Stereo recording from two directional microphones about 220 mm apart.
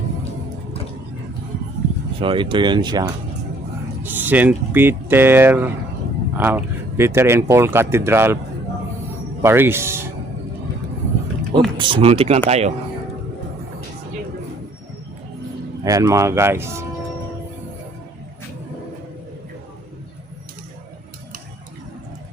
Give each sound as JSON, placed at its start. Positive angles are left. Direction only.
{"t": 2.2, "sound": "speech", "side_deg": -20}
{"t": 4.0, "sound": "speech", "side_deg": -10}
{"t": 9.4, "sound": "speech", "side_deg": -10}
{"t": 11.8, "sound": "speech", "side_deg": -20}
{"t": 15.8, "sound": "speech", "side_deg": -15}